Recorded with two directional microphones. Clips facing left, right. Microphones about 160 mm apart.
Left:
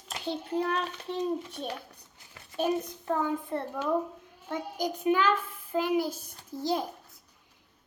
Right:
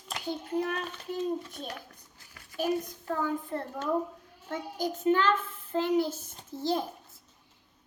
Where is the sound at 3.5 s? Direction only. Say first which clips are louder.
Left 3 dB; 25° left (ahead or behind).